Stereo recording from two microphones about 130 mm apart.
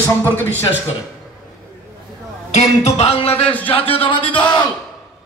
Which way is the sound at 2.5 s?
55° left (ahead or behind).